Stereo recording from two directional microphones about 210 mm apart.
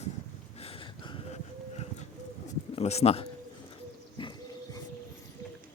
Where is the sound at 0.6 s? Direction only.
25° left (ahead or behind).